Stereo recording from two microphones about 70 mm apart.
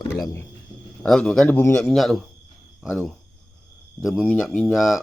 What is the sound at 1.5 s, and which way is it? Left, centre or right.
Speech, left.